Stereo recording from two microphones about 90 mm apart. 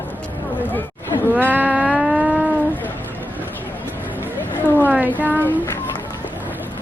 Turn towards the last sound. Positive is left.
turn(degrees=-20)  # may be behind; listen again after turning